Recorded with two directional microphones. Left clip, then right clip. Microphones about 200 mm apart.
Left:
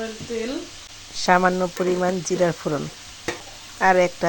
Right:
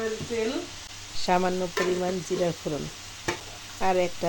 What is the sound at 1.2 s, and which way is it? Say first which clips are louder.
Speech: left 7 dB; 10° left (ahead or behind).